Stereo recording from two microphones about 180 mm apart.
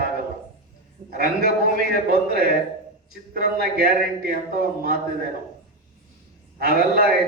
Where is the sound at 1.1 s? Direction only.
60° right (ahead or behind).